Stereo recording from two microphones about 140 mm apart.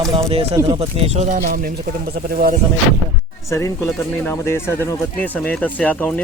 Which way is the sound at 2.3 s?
90° right.